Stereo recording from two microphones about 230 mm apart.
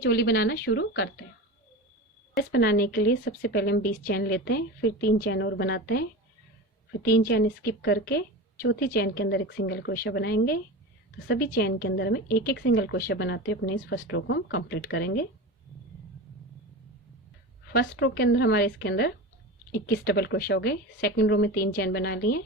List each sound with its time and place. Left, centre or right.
0.0 s a woman's voice: left
2.5 s a woman's voice: left
14.1 s a woman's voice: left
17.7 s a woman's voice: left